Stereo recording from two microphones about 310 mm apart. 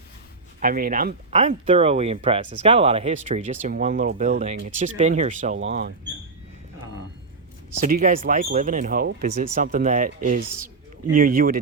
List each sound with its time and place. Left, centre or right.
0.6 s speech: right
7.9 s speech: right